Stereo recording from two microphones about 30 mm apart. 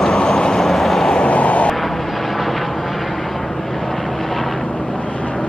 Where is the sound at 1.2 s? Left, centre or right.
Left.